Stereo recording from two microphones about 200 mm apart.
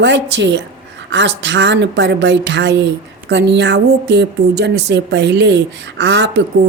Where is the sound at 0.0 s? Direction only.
60° right (ahead or behind).